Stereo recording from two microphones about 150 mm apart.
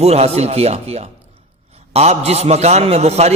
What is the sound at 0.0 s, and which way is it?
A man's voice, 45° right (ahead or behind).